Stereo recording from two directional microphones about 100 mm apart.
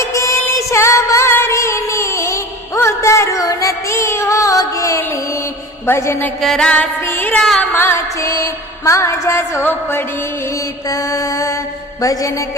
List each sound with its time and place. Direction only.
0.0 s music: 30° left (ahead or behind)
6.4 s music: 5° left (ahead or behind)
7.0 s music: 20° left (ahead or behind)
7.3 s carnatic music: 5° left (ahead or behind)
7.6 s music: 20° left (ahead or behind)
10.8 s mantra: 35° left (ahead or behind)